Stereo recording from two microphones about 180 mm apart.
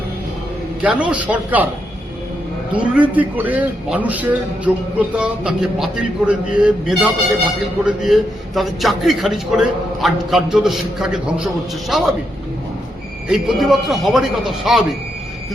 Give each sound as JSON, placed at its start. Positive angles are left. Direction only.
{"t": 0.8, "sound": "a man's voice", "side_deg": -5}
{"t": 2.7, "sound": "a man's voice", "side_deg": -10}
{"t": 13.2, "sound": "a man's voice", "side_deg": 0}